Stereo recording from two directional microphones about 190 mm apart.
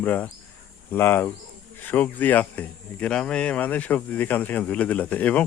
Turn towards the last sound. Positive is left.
turn(degrees=10)  # may be behind; listen again after turning